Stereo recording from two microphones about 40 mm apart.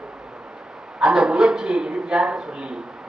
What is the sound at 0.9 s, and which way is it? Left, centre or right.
A man's voice, centre.